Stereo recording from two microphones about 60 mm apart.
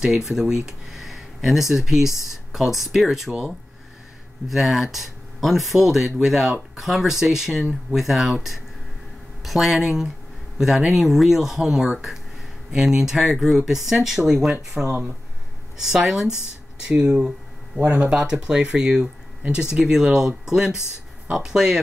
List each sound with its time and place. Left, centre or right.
0.0 s speech: centre
4.5 s speech: centre; by 18.1 s right
18.1 s speech: centre